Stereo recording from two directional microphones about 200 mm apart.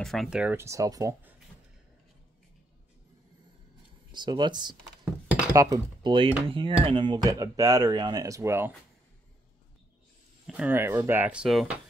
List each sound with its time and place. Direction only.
0.0 s speech: centre (ahead or behind); by 1.3 s 15° right (ahead or behind)
4.1 s speech: 20° right (ahead or behind)
10.4 s speech: 5° right (ahead or behind)